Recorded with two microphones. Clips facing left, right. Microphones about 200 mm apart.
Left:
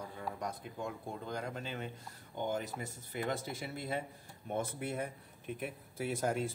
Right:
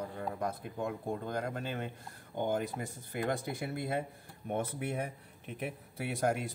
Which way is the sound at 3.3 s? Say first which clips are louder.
Right 4 dB; 55° right (ahead or behind).